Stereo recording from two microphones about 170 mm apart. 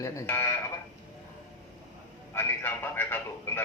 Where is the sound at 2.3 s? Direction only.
15° left (ahead or behind).